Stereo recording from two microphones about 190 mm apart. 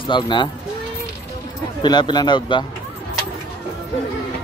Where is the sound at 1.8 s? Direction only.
20° left (ahead or behind).